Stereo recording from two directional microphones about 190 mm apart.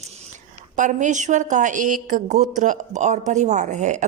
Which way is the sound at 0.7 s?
40° right (ahead or behind).